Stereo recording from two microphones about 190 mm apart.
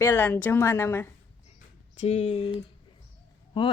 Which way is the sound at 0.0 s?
10° left (ahead or behind).